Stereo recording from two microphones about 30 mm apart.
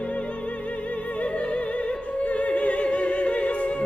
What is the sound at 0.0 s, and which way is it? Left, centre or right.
Music, left.